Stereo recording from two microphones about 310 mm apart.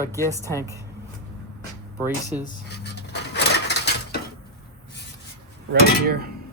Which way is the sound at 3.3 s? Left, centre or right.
Left.